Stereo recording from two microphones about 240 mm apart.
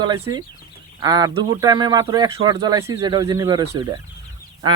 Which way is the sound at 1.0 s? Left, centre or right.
Centre.